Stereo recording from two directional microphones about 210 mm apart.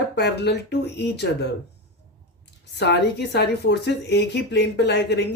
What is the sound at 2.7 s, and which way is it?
Speech, 55° left (ahead or behind).